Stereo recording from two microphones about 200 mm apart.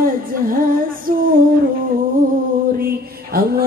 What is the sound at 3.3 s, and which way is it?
Mantra, 45° right (ahead or behind).